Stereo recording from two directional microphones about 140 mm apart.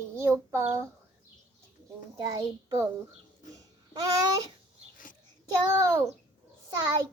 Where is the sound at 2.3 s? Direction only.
25° right (ahead or behind).